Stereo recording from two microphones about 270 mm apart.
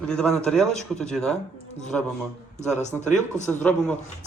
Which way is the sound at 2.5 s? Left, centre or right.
Left.